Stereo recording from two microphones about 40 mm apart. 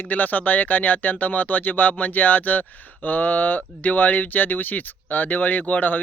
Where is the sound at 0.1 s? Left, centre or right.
Left.